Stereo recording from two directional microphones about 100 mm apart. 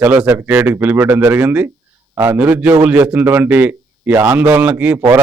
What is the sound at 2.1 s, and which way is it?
Speech, 25° right (ahead or behind).